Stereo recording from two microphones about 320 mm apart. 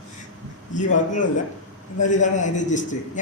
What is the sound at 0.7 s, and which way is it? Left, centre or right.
Speech, left.